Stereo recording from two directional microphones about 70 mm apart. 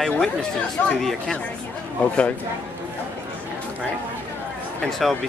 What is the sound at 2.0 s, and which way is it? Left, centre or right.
Speech, centre.